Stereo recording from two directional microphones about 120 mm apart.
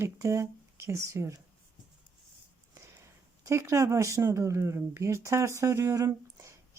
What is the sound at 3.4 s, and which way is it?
Speech, 25° right (ahead or behind).